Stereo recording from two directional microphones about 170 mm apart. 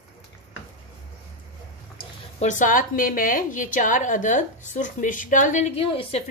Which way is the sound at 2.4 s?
50° left (ahead or behind).